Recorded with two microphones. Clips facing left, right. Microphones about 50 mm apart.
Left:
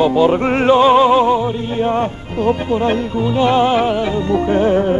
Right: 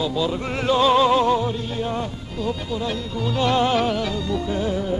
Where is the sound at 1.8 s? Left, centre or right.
Left.